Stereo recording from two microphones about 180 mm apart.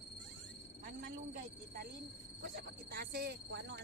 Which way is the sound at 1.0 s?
50° right (ahead or behind).